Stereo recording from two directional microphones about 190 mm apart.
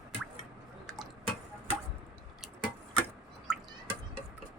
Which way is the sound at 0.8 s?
Centre (ahead or behind).